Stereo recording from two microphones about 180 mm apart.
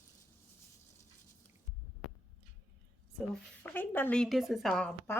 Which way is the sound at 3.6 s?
10° left (ahead or behind).